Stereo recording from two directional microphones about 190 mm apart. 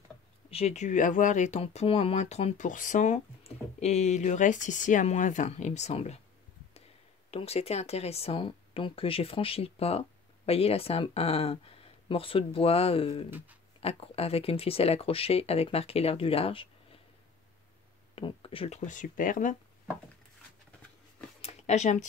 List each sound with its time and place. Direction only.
0.5 s speech: 35° left (ahead or behind)
7.2 s speech: 30° left (ahead or behind)
18.1 s speech: 30° left (ahead or behind); by 19.5 s 45° left (ahead or behind)
21.4 s a sound: 35° left (ahead or behind)